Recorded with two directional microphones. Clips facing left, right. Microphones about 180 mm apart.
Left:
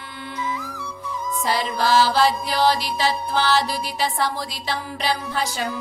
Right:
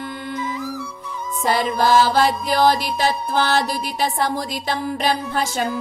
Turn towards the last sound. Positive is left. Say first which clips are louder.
# right 3 dB
turn(degrees=-50)  # may be behind; listen again after turning